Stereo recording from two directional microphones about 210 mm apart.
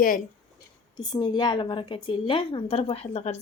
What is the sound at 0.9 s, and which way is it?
A woman's voice, 20° left (ahead or behind).